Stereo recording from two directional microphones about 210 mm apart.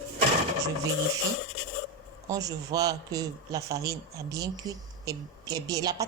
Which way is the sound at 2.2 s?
15° right (ahead or behind).